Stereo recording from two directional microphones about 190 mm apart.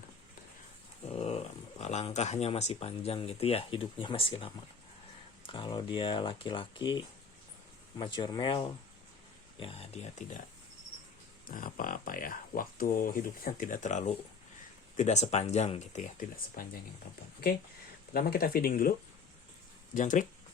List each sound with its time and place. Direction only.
1.1 s roaring cats: 35° left (ahead or behind)
1.8 s speech: 35° left (ahead or behind)
5.5 s speech: 25° left (ahead or behind)
11.4 s speech: 45° left (ahead or behind)
16.6 s speech: 50° left (ahead or behind)
18.1 s speech: 50° left (ahead or behind)